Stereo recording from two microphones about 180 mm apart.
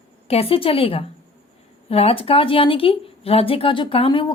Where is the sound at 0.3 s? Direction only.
35° left (ahead or behind).